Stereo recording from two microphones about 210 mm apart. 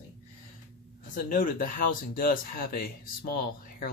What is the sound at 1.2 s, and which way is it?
Speech, 40° left (ahead or behind).